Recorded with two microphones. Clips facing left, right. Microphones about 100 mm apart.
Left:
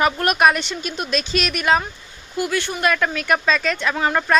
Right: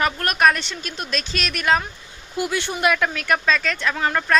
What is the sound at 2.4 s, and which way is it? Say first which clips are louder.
Speech: left 1 dB; 20° right (ahead or behind).